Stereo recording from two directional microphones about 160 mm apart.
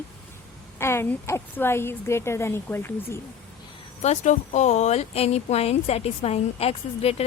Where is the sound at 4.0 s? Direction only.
45° left (ahead or behind).